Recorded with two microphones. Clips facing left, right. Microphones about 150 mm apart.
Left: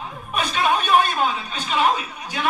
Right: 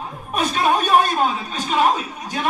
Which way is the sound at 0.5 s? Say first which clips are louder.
Right 1 dB; 40° right (ahead or behind).